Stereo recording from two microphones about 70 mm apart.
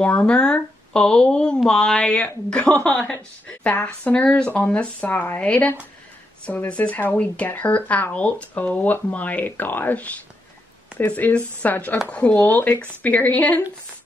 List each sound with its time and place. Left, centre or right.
0.0 s speech: centre
12.4 s speech: left